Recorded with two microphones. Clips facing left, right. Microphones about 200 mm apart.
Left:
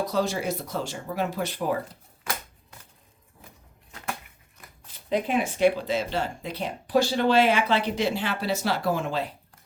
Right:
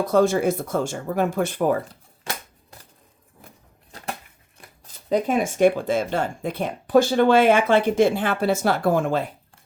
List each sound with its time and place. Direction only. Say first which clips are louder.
0.0 s speech: right 8 dB; 50° right (ahead or behind)
2.2 s shuffling cards: right 1 dB; 30° right (ahead or behind)
5.0 s speech: right 4 dB; 45° right (ahead or behind)